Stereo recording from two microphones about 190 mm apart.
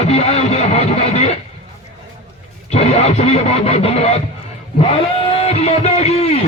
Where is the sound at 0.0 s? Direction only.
35° left (ahead or behind).